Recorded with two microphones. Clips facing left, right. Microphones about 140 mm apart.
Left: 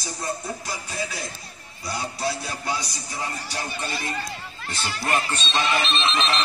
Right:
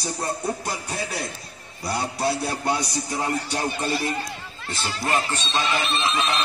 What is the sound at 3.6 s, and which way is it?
Speech, 35° right (ahead or behind).